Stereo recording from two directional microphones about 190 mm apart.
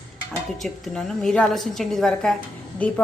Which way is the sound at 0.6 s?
5° left (ahead or behind).